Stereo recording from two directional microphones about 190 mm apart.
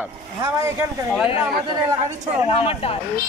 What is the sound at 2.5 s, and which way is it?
Speech, 30° left (ahead or behind).